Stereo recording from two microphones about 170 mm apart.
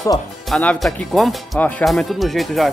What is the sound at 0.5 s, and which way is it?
Speech, 5° left (ahead or behind).